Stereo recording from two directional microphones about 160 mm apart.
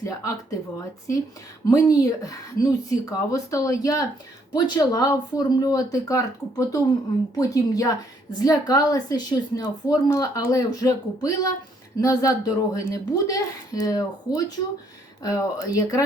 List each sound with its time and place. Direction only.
0.0 s a woman's voice: 20° left (ahead or behind)